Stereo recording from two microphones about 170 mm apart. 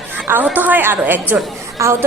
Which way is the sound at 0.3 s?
10° right (ahead or behind).